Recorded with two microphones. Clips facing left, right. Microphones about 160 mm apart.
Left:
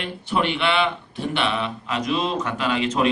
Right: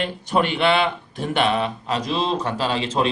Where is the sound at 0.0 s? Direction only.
40° right (ahead or behind).